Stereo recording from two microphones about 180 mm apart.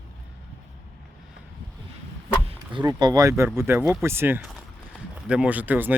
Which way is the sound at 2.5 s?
25° right (ahead or behind).